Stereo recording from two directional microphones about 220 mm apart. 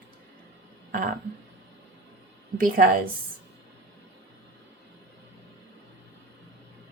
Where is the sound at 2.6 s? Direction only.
40° right (ahead or behind).